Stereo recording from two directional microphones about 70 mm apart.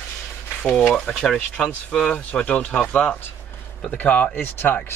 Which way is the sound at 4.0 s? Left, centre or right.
Left.